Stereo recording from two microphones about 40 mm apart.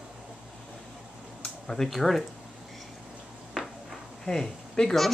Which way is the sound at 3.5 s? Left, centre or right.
Centre.